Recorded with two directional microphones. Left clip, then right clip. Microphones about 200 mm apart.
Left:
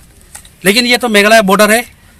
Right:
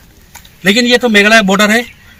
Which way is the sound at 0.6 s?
35° left (ahead or behind).